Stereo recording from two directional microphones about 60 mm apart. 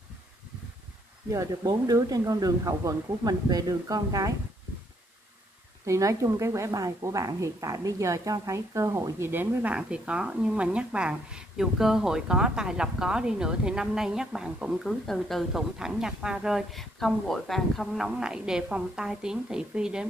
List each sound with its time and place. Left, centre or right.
1.3 s speech: right
5.9 s a woman's voice: right
9.2 s speech: right
9.7 s a woman's voice: centre
14.9 s speech: centre
15.8 s a woman's voice: centre
16.7 s speech: centre
18.1 s a woman's voice: centre